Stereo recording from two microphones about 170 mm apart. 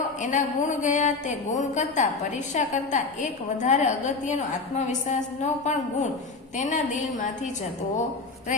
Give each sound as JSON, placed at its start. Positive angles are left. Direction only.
{"t": 0.2, "sound": "a woman's voice", "side_deg": 45}